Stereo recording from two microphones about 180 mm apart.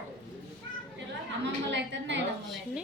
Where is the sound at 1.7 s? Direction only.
80° right.